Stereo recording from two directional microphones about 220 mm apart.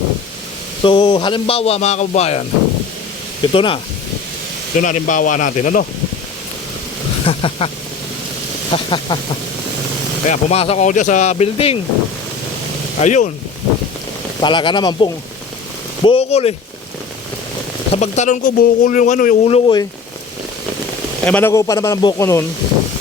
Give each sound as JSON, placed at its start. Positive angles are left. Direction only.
{"t": 0.8, "sound": "a man's voice", "side_deg": 25}
{"t": 3.4, "sound": "a man's voice", "side_deg": 25}
{"t": 4.8, "sound": "speech", "side_deg": 35}
{"t": 7.3, "sound": "a man's voice", "side_deg": 25}
{"t": 8.7, "sound": "a man's voice", "side_deg": 20}
{"t": 10.2, "sound": "speech", "side_deg": 25}
{"t": 13.0, "sound": "speech", "side_deg": 35}
{"t": 14.4, "sound": "a man's voice", "side_deg": 20}
{"t": 17.9, "sound": "speech", "side_deg": 30}
{"t": 21.2, "sound": "speech", "side_deg": 10}